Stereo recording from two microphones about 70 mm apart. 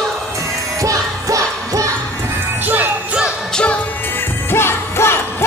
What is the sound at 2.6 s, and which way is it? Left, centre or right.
Music, right.